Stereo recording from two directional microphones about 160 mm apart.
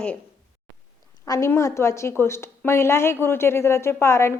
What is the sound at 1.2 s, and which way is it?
A woman's voice, 15° left (ahead or behind).